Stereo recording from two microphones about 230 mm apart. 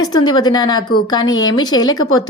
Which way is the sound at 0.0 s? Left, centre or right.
Centre.